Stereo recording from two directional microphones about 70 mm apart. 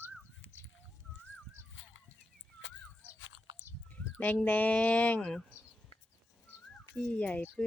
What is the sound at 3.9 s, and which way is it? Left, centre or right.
Speech, left.